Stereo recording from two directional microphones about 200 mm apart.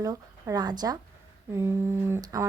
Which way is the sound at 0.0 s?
15° right (ahead or behind).